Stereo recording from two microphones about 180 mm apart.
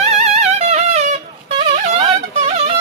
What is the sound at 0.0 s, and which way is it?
Music, 40° right (ahead or behind).